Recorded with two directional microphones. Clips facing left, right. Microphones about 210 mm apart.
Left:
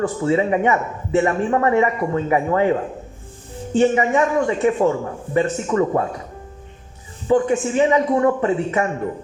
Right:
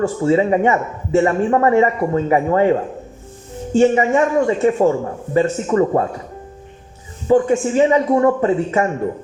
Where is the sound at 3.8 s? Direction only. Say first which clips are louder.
Right 3 dB; 30° right (ahead or behind).